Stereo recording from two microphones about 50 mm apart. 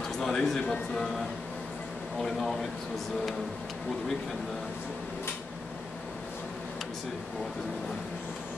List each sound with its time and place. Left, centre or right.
0.2 s speech: centre
2.2 s speech: centre